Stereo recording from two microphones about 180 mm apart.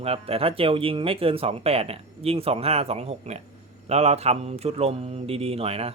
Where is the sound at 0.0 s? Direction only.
35° right (ahead or behind).